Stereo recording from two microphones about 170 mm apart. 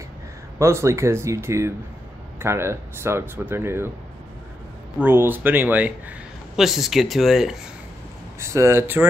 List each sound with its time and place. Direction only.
0.6 s a man's voice: 15° right (ahead or behind)
4.9 s a man's voice: 10° right (ahead or behind)
8.4 s a man's voice: 15° right (ahead or behind)